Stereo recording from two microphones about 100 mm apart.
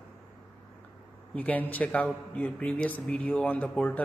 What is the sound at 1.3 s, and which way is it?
A man's voice, 15° left (ahead or behind).